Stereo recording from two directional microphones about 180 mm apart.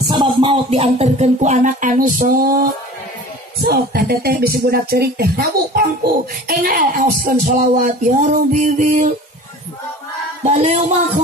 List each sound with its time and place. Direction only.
0.1 s speech: 25° right (ahead or behind); by 2.7 s 50° right (ahead or behind)
3.6 s music: 60° right (ahead or behind); by 9.1 s 40° right (ahead or behind)
10.4 s speech: 40° right (ahead or behind)